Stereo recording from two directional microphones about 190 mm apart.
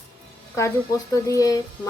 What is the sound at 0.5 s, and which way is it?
Speech, 15° left (ahead or behind).